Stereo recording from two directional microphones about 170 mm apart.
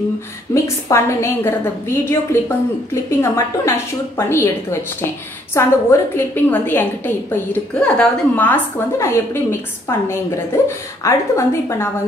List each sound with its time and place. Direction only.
0.5 s a woman's voice: 15° left (ahead or behind)